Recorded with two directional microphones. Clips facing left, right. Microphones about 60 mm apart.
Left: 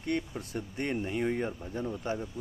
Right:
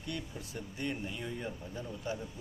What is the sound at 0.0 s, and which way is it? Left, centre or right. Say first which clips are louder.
Speech: left 8 dB; left.